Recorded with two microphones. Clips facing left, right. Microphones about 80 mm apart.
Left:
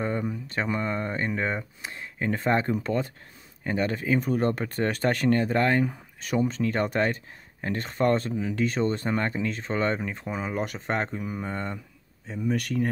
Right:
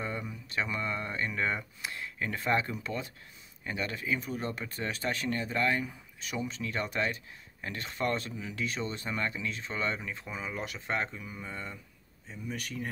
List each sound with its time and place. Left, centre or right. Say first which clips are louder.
0.0 s speech: left 8 dB; left